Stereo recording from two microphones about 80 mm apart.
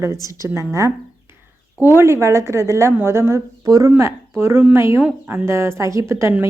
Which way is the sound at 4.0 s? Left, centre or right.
Right.